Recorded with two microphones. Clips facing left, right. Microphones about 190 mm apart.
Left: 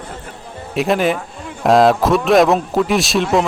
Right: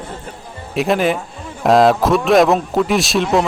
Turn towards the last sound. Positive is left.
turn(degrees=0)  # may be behind; listen again after turning